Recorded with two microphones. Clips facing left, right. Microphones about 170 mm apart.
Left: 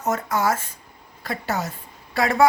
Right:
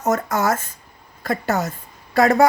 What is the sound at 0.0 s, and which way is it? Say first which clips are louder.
A woman's voice: right 3 dB; 45° right (ahead or behind).